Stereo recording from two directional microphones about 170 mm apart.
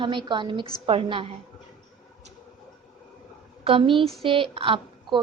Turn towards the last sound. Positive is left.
turn(degrees=-30)  # may be behind; listen again after turning